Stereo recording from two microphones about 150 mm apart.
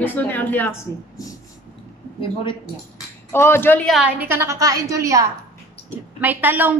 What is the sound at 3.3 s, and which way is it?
Speech, 15° left (ahead or behind).